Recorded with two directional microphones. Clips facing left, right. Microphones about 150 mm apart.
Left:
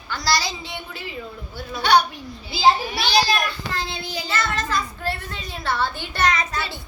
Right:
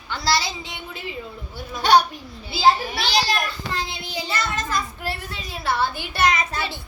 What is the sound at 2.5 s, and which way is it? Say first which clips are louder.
Speech: even; centre (ahead or behind).